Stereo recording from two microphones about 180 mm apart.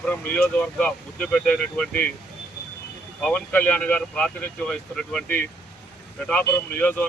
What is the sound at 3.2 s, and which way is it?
Speech, 10° left (ahead or behind).